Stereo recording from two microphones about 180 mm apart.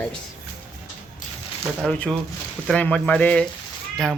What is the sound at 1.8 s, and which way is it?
Speech, 5° left (ahead or behind).